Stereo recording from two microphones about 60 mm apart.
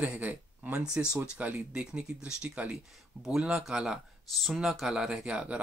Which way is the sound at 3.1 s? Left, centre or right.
Right.